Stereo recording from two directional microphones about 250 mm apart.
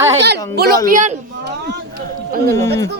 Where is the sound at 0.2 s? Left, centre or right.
Right.